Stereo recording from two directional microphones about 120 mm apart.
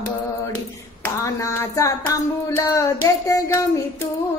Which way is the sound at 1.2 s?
25° left (ahead or behind).